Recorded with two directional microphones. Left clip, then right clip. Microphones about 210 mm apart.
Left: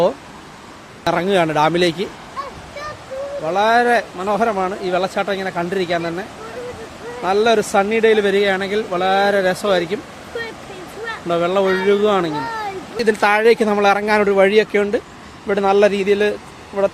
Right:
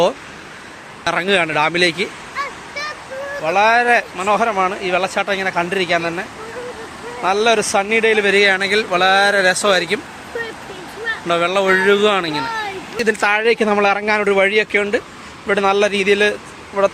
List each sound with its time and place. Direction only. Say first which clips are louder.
1.0 s speech: even; 5° left (ahead or behind)
3.4 s speech: right 1 dB; 15° left (ahead or behind)
7.3 s speech: even; 20° left (ahead or behind)
11.3 s speech: right 1 dB; 5° left (ahead or behind)